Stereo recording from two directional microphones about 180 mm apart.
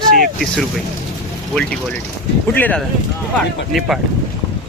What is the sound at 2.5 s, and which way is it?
Speech, 10° left (ahead or behind).